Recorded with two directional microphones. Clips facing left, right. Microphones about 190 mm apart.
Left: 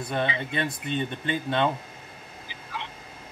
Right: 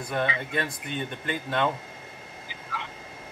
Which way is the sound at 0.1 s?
25° left (ahead or behind).